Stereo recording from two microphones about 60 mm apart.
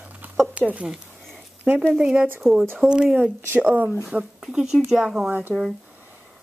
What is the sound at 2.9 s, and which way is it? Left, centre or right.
A woman's voice, centre.